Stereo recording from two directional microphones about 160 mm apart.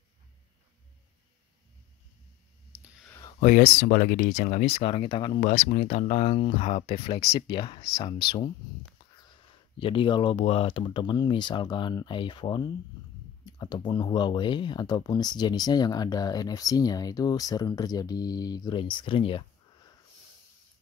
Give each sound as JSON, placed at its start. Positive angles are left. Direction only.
{"t": 2.7, "sound": "whispering", "side_deg": -10}
{"t": 3.3, "sound": "speech", "side_deg": 60}
{"t": 4.7, "sound": "speech", "side_deg": 35}
{"t": 5.7, "sound": "speech", "side_deg": 50}
{"t": 9.8, "sound": "speech", "side_deg": 30}